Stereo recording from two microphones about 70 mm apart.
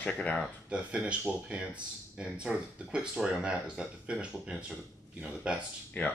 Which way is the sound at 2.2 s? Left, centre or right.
Centre.